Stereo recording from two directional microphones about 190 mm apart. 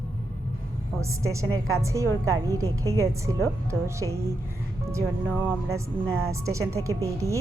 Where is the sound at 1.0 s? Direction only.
15° right (ahead or behind).